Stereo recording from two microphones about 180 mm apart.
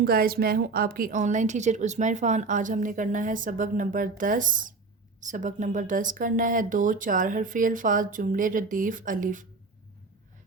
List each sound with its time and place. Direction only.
0.0 s a woman's voice: 55° right (ahead or behind)